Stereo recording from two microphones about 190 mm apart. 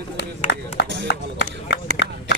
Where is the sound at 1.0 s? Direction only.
60° left (ahead or behind).